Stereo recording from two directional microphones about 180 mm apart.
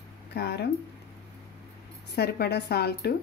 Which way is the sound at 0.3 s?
65° left (ahead or behind).